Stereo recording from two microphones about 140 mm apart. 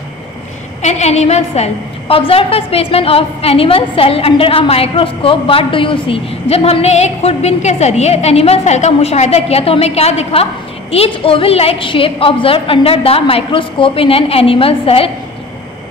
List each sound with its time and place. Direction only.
0.8 s a woman's voice: 55° left (ahead or behind)